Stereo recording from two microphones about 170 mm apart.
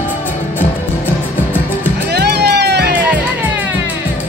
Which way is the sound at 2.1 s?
75° right (ahead or behind).